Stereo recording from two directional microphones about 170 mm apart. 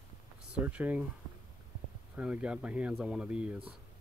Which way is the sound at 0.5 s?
10° right (ahead or behind).